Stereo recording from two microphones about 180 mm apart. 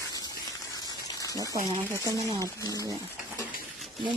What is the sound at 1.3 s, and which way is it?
Speech, 20° right (ahead or behind).